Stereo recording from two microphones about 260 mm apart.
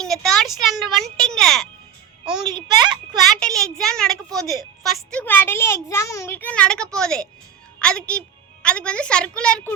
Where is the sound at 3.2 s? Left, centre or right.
Centre.